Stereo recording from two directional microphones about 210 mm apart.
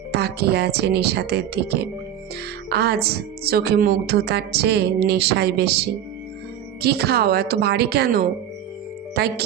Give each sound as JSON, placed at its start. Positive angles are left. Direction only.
{"t": 0.1, "sound": "a woman's voice", "side_deg": -50}
{"t": 6.8, "sound": "a woman's voice", "side_deg": -50}